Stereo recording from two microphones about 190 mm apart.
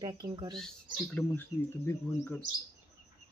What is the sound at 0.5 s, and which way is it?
Speech, 5° left (ahead or behind).